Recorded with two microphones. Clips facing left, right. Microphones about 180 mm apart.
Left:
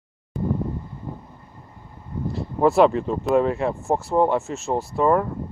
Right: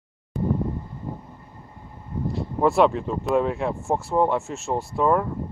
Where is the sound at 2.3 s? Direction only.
Centre (ahead or behind).